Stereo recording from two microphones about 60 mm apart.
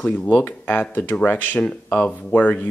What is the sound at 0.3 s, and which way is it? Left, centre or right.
Speech, left.